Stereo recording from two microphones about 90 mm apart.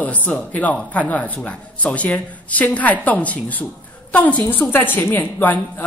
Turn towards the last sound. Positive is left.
turn(degrees=20)  # may be behind; listen again after turning